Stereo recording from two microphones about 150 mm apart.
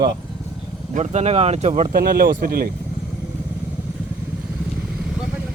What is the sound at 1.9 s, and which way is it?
Speech, 90° right.